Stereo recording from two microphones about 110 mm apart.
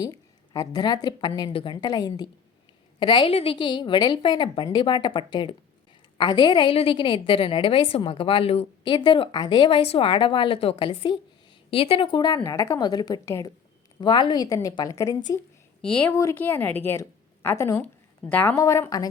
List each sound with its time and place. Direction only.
0.0 s a woman's voice: 35° left (ahead or behind); by 8.9 s 60° left (ahead or behind)
8.9 s a woman's voice: 45° left (ahead or behind)
12.2 s speech: 35° left (ahead or behind)
13.2 s a woman's voice: 25° left (ahead or behind)
14.0 s speech: 45° left (ahead or behind); by 15.2 s 30° left (ahead or behind)
15.8 s a woman's voice: 5° left (ahead or behind); by 17.8 s 25° left (ahead or behind)
17.8 s a sound: 15° left (ahead or behind)
18.5 s a woman's voice: 25° left (ahead or behind)